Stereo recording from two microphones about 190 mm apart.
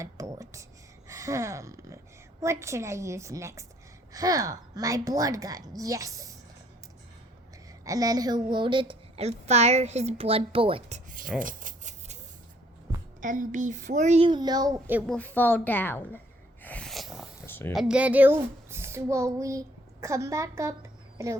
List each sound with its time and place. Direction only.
0.0 s whispering: 15° right (ahead or behind)
1.0 s gasp: 15° right (ahead or behind)
2.4 s a woman's voice: 15° right (ahead or behind)
7.9 s a woman's voice: 20° right (ahead or behind); by 11.3 s 40° right (ahead or behind)
11.3 s a sound: 45° right (ahead or behind)
13.2 s a woman's voice: 45° right (ahead or behind)
14.3 s a woman's voice: 20° right (ahead or behind)
15.0 s a woman's voice: 5° left (ahead or behind)
16.6 s a sound: 5° left (ahead or behind)
17.4 s a sound: 10° left (ahead or behind)
17.7 s a child's voice: 5° right (ahead or behind)